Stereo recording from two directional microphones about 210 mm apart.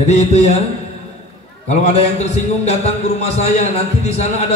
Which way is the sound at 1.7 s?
30° left (ahead or behind).